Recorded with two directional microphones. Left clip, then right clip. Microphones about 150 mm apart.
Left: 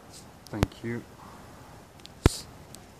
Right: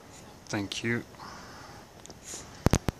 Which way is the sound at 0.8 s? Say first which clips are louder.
Right 5 dB; 25° right (ahead or behind).